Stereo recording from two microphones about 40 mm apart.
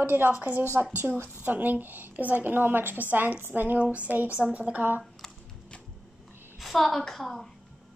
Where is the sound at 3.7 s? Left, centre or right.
Right.